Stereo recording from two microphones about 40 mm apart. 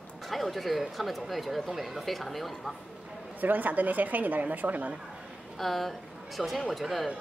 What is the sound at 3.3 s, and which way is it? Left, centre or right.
A woman's voice, right.